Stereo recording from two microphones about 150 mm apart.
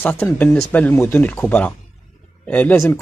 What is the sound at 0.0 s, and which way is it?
Speech, 10° left (ahead or behind).